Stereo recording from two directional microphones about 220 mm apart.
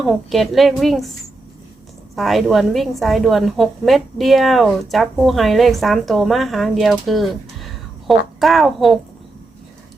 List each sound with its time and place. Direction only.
0.0 s a woman's voice: centre (ahead or behind)
2.1 s a woman's voice: centre (ahead or behind)